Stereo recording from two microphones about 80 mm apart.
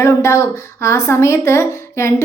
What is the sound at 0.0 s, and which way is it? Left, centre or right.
Speech, left.